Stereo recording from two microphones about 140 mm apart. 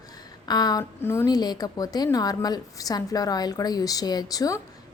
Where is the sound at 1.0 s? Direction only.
15° left (ahead or behind).